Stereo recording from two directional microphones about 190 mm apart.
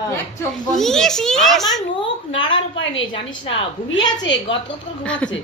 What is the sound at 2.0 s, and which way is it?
A woman's voice, 25° left (ahead or behind).